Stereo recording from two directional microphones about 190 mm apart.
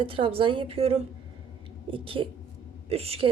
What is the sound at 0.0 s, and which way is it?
A woman's voice, 30° right (ahead or behind).